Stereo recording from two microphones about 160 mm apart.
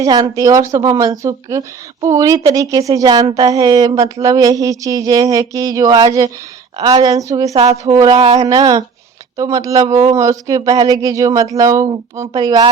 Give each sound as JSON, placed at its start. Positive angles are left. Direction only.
{"t": 0.0, "sound": "speech", "side_deg": -20}
{"t": 8.1, "sound": "speech", "side_deg": -40}
{"t": 8.4, "sound": "speech", "side_deg": -25}